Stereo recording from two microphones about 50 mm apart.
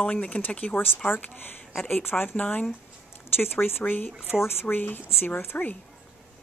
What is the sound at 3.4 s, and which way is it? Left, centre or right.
Speech, left.